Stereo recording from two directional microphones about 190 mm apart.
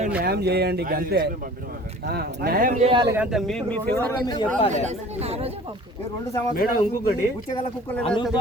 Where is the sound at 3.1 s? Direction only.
5° right (ahead or behind).